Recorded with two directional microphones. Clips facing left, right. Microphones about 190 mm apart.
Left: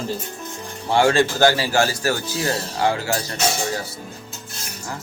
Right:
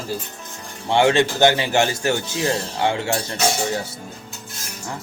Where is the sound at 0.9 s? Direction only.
20° right (ahead or behind).